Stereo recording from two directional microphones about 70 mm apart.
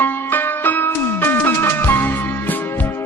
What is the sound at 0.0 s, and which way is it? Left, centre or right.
Music, left.